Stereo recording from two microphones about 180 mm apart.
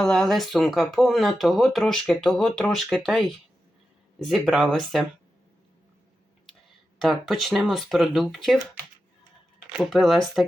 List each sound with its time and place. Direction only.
0.0 s speech: centre (ahead or behind)
7.0 s speech: centre (ahead or behind)
9.7 s speech: centre (ahead or behind)